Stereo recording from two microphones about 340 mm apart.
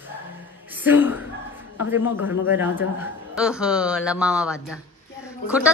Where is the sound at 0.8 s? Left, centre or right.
Centre.